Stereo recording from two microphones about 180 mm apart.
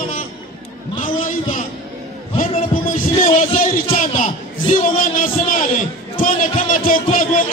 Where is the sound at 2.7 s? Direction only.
50° left (ahead or behind).